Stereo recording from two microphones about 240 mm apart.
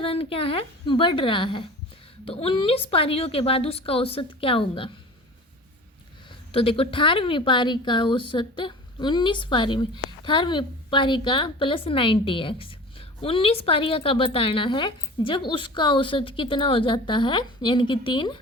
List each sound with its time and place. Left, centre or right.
0.0 s a woman's voice: left
6.5 s a woman's voice: left